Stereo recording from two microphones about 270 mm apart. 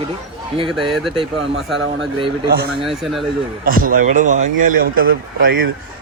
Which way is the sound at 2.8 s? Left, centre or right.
Centre.